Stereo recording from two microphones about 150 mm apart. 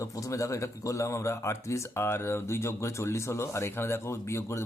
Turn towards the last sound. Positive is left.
turn(degrees=20)  # may be behind; listen again after turning